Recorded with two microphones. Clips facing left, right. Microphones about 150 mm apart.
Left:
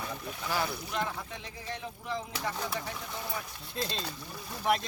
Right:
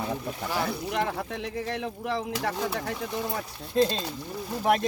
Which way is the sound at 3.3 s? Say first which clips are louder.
Right 12 dB; 50° right (ahead or behind).